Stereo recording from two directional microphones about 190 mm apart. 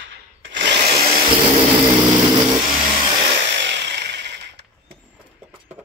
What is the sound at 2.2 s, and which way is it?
Vehicle, 25° right (ahead or behind).